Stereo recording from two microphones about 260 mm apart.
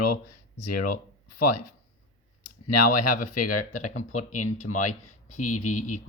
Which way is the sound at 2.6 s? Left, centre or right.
Left.